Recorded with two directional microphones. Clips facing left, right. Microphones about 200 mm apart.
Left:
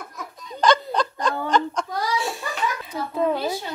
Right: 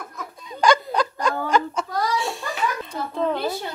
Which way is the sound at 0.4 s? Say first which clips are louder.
Right 1 dB; 10° right (ahead or behind).